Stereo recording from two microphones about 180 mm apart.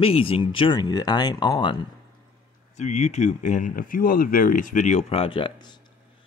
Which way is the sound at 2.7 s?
40° left (ahead or behind).